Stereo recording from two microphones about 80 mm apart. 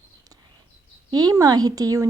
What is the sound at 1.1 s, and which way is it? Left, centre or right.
Speech, right.